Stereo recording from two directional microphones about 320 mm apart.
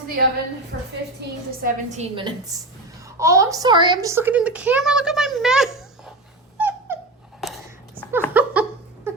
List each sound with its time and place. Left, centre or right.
0.2 s a woman's voice: right
1.6 s a woman's voice: right; by 5.8 s centre
6.6 s dog: centre
7.4 s a sound: centre